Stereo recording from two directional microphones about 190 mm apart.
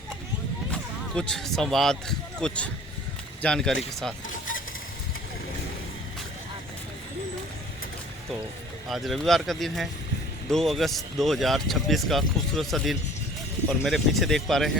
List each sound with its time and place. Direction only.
0.7 s speech: 5° left (ahead or behind)
4.3 s vehicle: 45° left (ahead or behind)
8.9 s speech: centre (ahead or behind)